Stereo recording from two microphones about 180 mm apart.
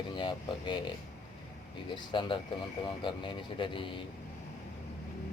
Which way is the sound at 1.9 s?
25° left (ahead or behind).